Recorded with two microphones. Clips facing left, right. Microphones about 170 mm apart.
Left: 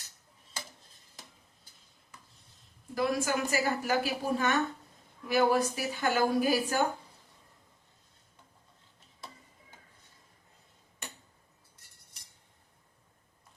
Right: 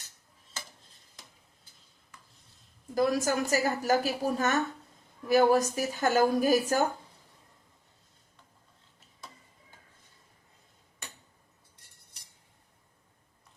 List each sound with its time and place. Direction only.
2.9 s a woman's voice: 40° right (ahead or behind)